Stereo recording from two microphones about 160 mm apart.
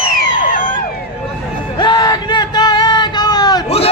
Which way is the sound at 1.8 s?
25° left (ahead or behind).